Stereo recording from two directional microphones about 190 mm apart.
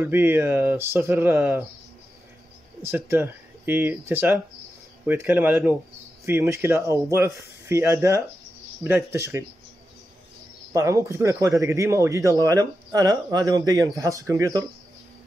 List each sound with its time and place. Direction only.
0.0 s speech: 10° right (ahead or behind)
2.8 s speech: 10° right (ahead or behind)
10.7 s speech: 15° right (ahead or behind)